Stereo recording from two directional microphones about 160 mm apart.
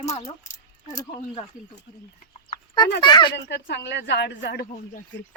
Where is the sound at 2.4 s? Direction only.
30° left (ahead or behind).